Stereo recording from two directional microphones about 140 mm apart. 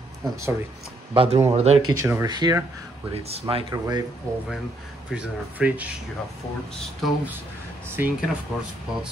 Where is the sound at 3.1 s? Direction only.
45° right (ahead or behind).